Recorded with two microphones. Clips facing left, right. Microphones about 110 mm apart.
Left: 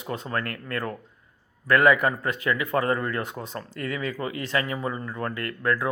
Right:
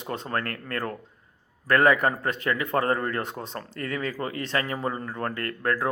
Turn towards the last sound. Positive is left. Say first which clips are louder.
# left 1 dB
turn(degrees=-40)  # may be behind; listen again after turning